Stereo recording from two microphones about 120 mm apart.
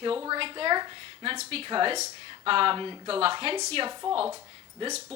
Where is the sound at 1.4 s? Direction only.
55° right (ahead or behind).